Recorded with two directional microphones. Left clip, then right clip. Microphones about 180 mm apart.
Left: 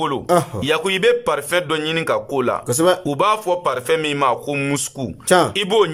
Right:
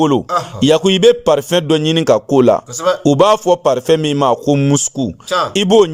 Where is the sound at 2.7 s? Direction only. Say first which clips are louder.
Even; 45° left (ahead or behind).